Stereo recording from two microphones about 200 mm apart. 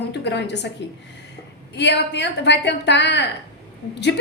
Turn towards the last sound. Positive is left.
turn(degrees=60)  # may be behind; listen again after turning